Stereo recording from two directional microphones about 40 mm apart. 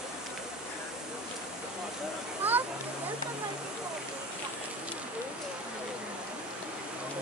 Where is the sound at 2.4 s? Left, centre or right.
Right.